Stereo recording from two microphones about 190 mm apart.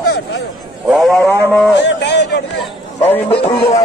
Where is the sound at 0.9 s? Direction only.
Centre (ahead or behind).